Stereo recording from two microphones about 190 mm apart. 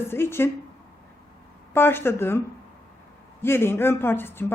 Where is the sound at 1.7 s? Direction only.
10° left (ahead or behind).